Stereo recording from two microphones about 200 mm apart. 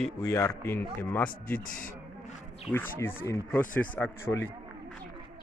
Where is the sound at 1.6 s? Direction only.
45° left (ahead or behind).